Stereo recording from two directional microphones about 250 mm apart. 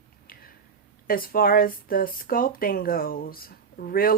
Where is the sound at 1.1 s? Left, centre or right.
Left.